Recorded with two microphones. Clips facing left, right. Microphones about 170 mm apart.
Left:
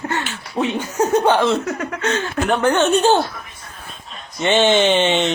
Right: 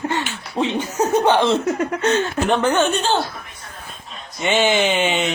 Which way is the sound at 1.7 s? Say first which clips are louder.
Right 3 dB; 30° right (ahead or behind).